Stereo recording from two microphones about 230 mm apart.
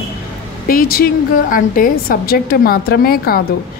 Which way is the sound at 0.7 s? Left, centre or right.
Left.